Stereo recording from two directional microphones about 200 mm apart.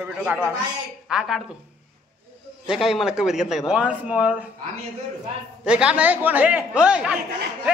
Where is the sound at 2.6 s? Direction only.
Centre (ahead or behind).